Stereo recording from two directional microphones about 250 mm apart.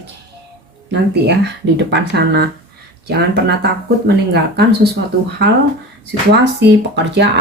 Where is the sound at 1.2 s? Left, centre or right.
Right.